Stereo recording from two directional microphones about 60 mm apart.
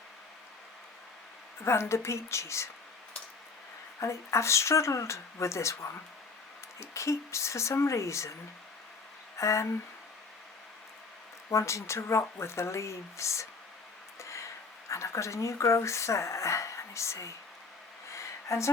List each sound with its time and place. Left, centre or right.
1.6 s speech: left
4.0 s speech: left
9.4 s speech: left
11.5 s speech: left
18.1 s a sound: left